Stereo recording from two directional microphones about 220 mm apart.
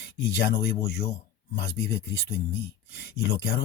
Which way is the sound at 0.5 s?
45° left (ahead or behind).